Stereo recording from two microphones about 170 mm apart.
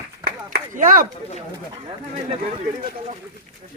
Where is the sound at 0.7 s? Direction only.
50° right (ahead or behind).